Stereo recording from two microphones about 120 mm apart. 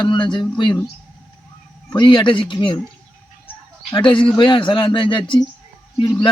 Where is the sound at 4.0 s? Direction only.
45° left (ahead or behind).